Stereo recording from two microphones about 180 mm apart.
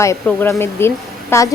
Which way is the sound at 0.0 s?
15° left (ahead or behind).